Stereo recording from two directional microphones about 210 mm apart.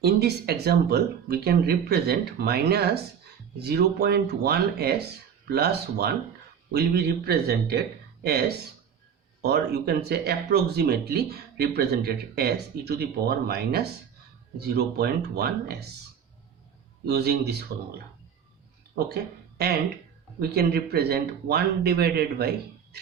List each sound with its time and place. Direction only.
0.0 s speech: 50° right (ahead or behind)
17.1 s speech: 50° right (ahead or behind)